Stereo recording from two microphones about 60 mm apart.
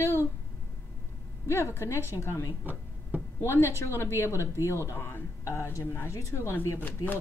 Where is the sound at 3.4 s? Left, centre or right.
Left.